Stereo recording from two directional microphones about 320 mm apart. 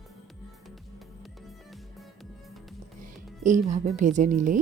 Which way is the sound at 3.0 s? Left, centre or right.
Right.